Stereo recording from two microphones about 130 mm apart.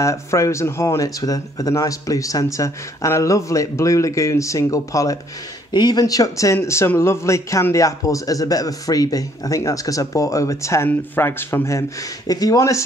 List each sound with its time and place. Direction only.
0.0 s speech: 25° left (ahead or behind)